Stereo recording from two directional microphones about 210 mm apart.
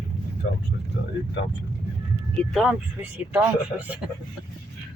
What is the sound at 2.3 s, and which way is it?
Speech, centre (ahead or behind).